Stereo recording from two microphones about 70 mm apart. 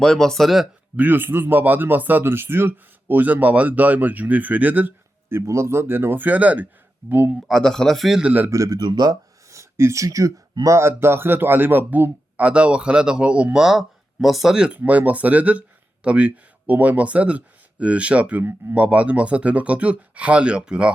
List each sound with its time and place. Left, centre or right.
0.0 s a man's voice: centre
0.9 s speech: right
5.5 s speech: right
7.4 s a man's voice: centre
8.2 s speech: right
8.4 s speech: right
8.8 s speech: right
9.5 s speech: right
10.7 s a man's voice: right; by 20.9 s centre